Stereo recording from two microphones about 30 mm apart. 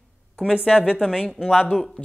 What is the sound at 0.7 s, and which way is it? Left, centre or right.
Speech, right.